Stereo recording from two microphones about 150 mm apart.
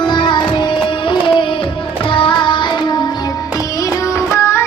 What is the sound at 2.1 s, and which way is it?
Music, 35° left (ahead or behind).